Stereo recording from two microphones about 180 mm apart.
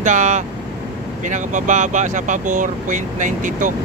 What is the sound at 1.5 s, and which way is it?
Speech, 45° right (ahead or behind).